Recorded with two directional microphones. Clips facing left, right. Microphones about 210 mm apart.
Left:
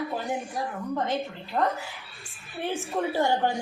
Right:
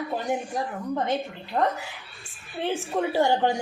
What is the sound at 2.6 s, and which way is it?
Speech, 15° right (ahead or behind).